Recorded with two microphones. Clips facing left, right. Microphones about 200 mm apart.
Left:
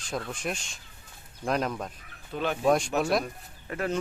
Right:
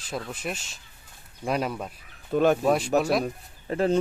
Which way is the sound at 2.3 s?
45° right (ahead or behind).